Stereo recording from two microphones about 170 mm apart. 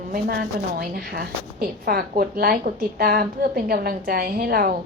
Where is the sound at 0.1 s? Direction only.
65° right (ahead or behind).